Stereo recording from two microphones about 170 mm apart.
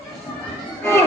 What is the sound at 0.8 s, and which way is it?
Music, 15° left (ahead or behind).